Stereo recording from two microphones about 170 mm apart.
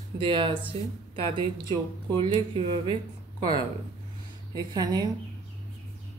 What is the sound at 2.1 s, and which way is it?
Speech, 30° right (ahead or behind).